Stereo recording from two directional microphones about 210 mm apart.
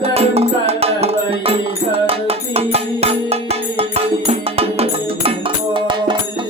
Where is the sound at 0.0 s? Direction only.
30° right (ahead or behind).